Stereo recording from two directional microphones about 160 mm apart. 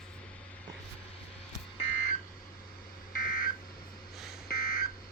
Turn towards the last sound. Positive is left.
turn(degrees=65)  # may be behind; listen again after turning